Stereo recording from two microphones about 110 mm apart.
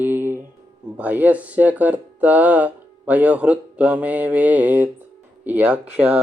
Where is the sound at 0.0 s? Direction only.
20° right (ahead or behind).